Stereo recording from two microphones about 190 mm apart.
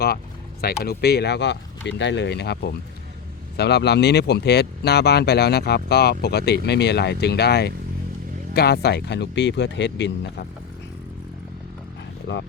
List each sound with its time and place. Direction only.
0.6 s speech: 55° left (ahead or behind)